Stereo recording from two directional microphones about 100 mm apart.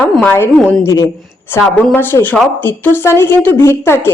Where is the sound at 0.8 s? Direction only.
30° left (ahead or behind).